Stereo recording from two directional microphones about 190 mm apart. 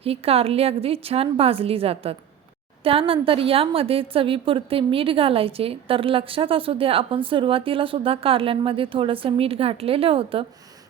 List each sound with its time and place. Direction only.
0.0 s a woman's voice: 30° right (ahead or behind)